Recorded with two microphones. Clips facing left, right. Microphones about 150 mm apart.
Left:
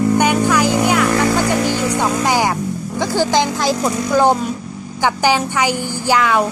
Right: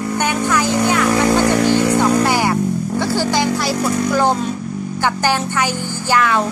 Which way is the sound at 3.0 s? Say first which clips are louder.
Left 3 dB; 15° left (ahead or behind).